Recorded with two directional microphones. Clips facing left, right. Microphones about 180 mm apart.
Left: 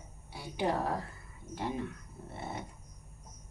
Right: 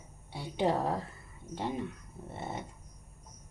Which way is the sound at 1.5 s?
25° right (ahead or behind).